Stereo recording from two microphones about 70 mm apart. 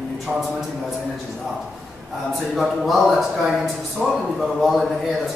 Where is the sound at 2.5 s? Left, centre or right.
Centre.